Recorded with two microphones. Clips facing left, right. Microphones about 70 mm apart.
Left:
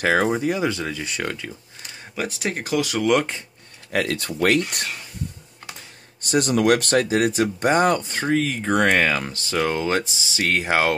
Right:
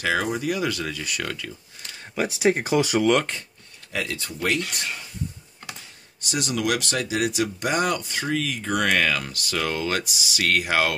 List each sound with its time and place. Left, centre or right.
0.0 s speech: left
2.1 s speech: centre
3.0 s speech: centre
3.9 s speech: left
4.6 s speech: left
6.2 s speech: left